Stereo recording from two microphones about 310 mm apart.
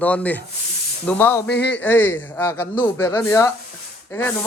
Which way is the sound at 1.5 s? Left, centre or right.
Left.